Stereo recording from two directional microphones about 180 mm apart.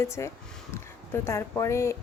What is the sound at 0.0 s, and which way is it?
Speech, 15° left (ahead or behind).